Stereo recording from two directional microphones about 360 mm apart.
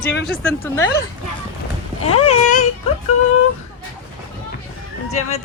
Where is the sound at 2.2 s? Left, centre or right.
Centre.